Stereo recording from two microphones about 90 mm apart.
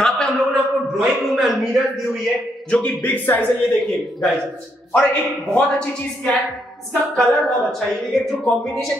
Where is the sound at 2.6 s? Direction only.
20° left (ahead or behind).